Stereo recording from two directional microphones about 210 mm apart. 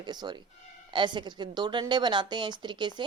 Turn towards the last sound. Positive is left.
turn(degrees=-20)  # may be behind; listen again after turning